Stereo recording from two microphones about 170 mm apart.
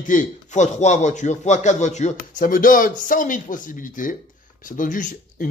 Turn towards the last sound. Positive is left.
turn(degrees=50)  # may be behind; listen again after turning